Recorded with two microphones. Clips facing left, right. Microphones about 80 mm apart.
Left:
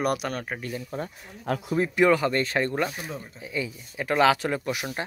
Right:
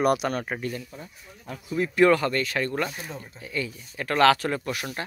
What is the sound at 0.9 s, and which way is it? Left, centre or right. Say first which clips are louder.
Speech: left 9 dB; left.